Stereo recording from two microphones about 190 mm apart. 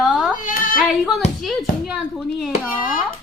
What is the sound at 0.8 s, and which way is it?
A child's voice, centre (ahead or behind).